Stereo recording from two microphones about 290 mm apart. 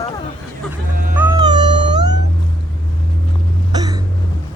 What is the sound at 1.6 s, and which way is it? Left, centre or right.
Cat, centre.